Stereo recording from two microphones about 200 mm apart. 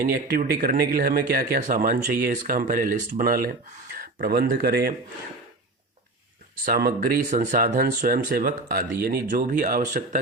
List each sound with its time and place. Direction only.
0.0 s speech: 50° right (ahead or behind)
6.7 s speech: 45° right (ahead or behind)